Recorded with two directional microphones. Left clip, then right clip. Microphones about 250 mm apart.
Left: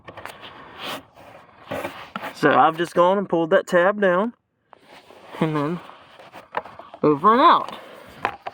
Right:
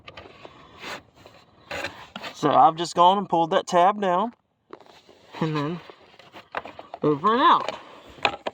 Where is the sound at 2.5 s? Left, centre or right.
Left.